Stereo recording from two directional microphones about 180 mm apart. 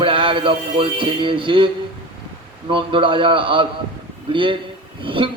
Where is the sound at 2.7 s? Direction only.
30° right (ahead or behind).